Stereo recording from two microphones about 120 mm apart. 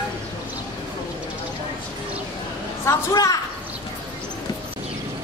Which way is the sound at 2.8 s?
25° left (ahead or behind).